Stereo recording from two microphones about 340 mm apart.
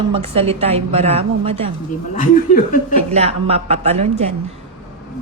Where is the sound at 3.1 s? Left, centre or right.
Centre.